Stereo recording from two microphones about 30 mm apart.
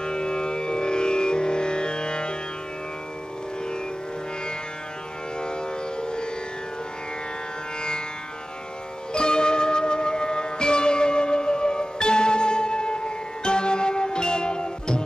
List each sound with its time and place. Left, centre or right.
0.0 s music: left
5.4 s civil defense siren: left
9.1 s music: left